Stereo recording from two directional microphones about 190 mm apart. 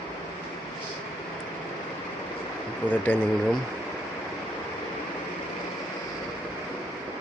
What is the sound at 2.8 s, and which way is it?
Speech, 10° left (ahead or behind).